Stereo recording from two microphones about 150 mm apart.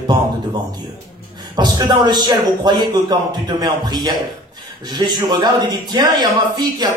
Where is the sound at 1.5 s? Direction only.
30° right (ahead or behind).